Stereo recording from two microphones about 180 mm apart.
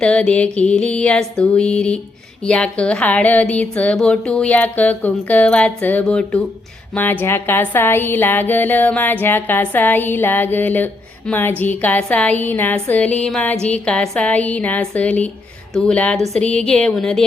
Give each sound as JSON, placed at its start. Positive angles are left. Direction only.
{"t": 0.0, "sound": "music", "side_deg": 5}
{"t": 2.4, "sound": "speech", "side_deg": 5}
{"t": 15.7, "sound": "music", "side_deg": 5}